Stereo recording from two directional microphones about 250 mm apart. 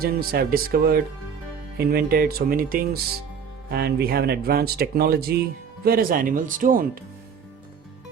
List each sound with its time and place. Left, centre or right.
0.0 s speech: right